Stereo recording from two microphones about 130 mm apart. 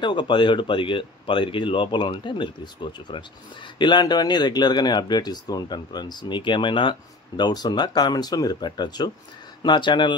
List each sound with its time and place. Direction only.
0.0 s speech: 35° left (ahead or behind)